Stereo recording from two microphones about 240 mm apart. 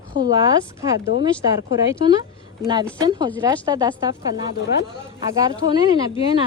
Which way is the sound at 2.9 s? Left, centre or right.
Centre.